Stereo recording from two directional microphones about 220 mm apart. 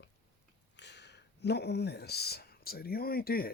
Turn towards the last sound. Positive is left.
turn(degrees=45)  # may be behind; listen again after turning